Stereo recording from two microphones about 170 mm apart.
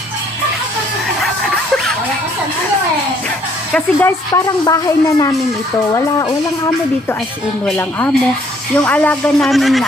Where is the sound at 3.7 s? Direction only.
10° left (ahead or behind).